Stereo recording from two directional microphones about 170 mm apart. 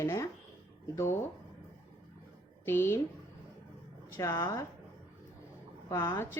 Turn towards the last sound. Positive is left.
turn(degrees=15)  # may be behind; listen again after turning